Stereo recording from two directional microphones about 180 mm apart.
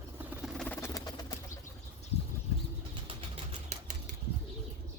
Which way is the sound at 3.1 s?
30° right (ahead or behind).